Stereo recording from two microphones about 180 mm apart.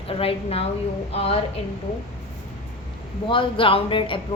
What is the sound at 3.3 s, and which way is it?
Speech, 30° left (ahead or behind).